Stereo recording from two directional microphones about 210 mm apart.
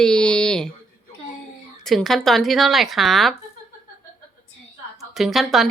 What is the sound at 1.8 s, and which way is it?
Speech, centre (ahead or behind).